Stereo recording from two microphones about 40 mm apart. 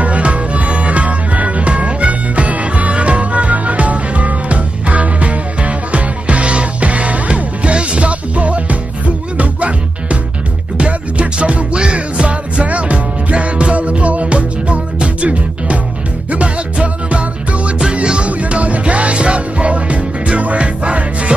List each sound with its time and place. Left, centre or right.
0.0 s music: right